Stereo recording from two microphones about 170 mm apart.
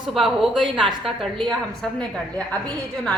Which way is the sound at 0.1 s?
Centre (ahead or behind).